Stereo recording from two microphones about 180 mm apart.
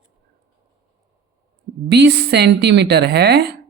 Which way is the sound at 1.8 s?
65° right (ahead or behind).